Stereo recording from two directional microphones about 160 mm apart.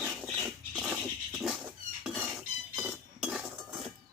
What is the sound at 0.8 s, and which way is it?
Dog, 5° right (ahead or behind).